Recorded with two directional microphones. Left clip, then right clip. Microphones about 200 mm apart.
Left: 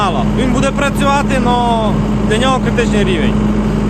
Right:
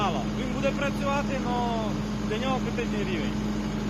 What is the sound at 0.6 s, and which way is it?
Speech, 15° left (ahead or behind).